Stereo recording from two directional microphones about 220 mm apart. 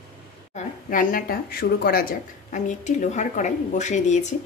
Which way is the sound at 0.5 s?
40° left (ahead or behind).